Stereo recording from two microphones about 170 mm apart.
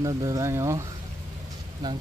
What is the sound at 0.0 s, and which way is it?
Speech, 20° right (ahead or behind).